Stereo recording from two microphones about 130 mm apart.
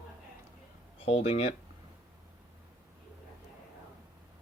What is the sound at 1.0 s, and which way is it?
Speech, 50° left (ahead or behind).